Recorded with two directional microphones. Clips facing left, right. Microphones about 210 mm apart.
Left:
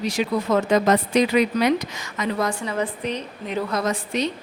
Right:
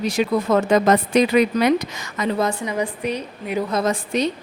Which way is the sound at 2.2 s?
25° right (ahead or behind).